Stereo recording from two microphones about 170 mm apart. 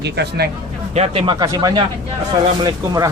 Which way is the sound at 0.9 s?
35° right (ahead or behind).